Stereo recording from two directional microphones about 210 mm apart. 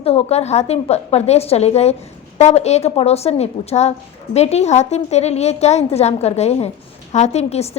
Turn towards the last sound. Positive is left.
turn(degrees=30)  # may be behind; listen again after turning